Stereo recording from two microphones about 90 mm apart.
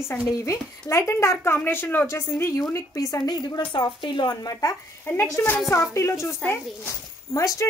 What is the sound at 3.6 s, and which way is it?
Speech, 60° left (ahead or behind).